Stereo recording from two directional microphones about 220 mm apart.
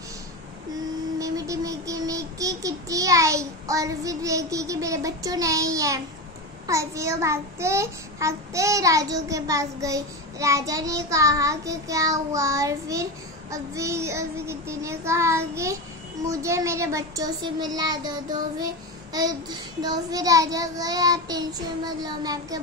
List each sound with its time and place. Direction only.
1.2 s child singing: 15° right (ahead or behind)
19.1 s child singing: 15° right (ahead or behind)